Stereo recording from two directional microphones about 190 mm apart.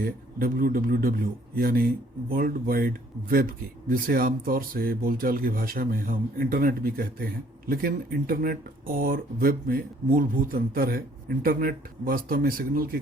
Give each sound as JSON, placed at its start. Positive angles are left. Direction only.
{"t": 0.0, "sound": "speech", "side_deg": -50}